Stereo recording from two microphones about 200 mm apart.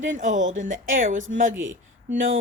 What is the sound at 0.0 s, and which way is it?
Speech, 40° right (ahead or behind).